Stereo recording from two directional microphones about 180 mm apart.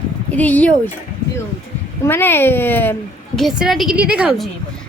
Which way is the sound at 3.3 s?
Centre (ahead or behind).